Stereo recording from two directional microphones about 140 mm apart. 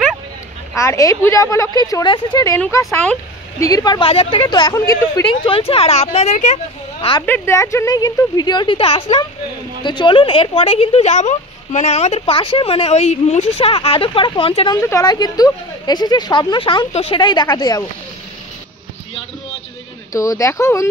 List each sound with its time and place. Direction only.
0.7 s a woman's voice: 20° left (ahead or behind)
4.1 s a woman's voice: 40° left (ahead or behind); by 5.2 s 25° left (ahead or behind)
5.2 s speech: 40° left (ahead or behind); by 7.1 s 55° left (ahead or behind)
7.2 s a woman's voice: 15° left (ahead or behind); by 14.7 s 40° left (ahead or behind)
14.8 s a woman's voice: 20° left (ahead or behind)
15.0 s a woman's voice: 30° left (ahead or behind)
20.1 s a woman's voice: 25° left (ahead or behind)